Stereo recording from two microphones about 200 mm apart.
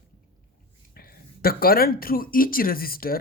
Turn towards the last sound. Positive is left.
turn(degrees=45)  # may be behind; listen again after turning